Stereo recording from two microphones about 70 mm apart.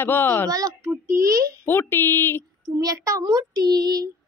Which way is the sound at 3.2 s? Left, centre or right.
Right.